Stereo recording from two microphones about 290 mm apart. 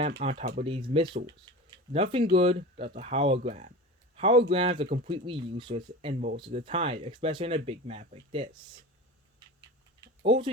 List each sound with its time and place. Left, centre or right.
0.2 s speech: right
10.2 s speech: centre